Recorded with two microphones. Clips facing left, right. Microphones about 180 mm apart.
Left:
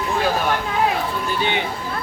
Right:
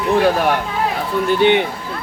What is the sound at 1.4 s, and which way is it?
Speech, 65° right (ahead or behind).